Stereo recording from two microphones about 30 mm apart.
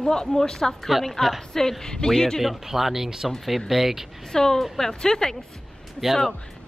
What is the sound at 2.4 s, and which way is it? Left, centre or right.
Speech, centre.